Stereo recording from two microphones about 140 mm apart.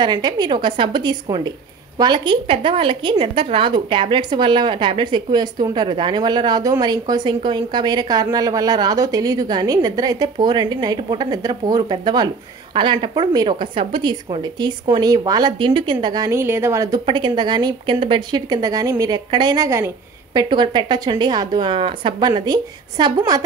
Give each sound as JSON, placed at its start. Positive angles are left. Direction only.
{"t": 0.0, "sound": "a woman's voice", "side_deg": -30}
{"t": 16.3, "sound": "a woman's voice", "side_deg": -20}
{"t": 17.0, "sound": "a woman's voice", "side_deg": -35}
{"t": 20.3, "sound": "a woman's voice", "side_deg": -35}